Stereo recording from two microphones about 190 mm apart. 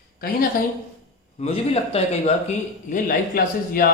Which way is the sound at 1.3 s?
35° left (ahead or behind).